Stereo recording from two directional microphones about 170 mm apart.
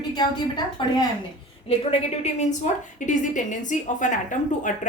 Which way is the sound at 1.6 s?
35° left (ahead or behind).